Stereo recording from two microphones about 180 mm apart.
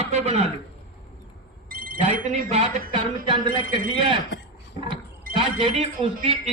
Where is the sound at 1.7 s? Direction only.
55° right (ahead or behind).